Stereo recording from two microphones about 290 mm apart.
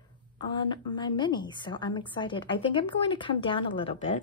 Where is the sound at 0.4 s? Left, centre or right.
Centre.